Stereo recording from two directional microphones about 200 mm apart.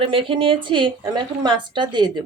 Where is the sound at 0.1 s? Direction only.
25° right (ahead or behind).